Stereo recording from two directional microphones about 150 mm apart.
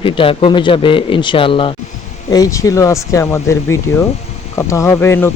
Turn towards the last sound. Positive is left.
turn(degrees=15)  # may be behind; listen again after turning